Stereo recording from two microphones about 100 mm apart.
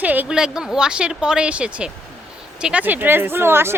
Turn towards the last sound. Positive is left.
turn(degrees=-25)  # may be behind; listen again after turning